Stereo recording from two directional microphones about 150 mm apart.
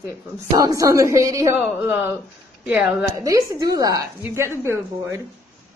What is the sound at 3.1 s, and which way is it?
A woman's voice, 20° right (ahead or behind).